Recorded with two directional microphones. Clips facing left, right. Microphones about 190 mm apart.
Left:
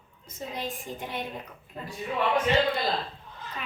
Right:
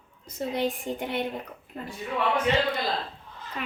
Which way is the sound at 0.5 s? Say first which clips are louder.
Right 7 dB; 70° right (ahead or behind).